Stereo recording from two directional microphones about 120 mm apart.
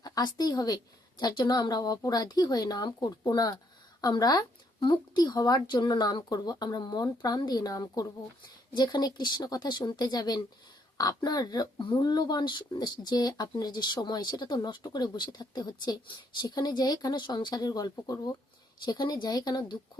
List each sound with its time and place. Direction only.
0.0 s a woman's voice: 35° left (ahead or behind)